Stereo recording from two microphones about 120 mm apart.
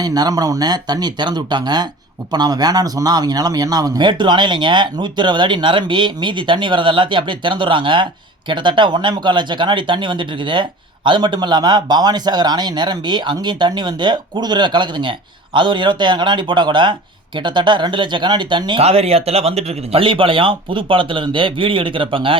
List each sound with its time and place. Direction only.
0.0 s speech: 30° right (ahead or behind)
18.8 s speech: 55° right (ahead or behind)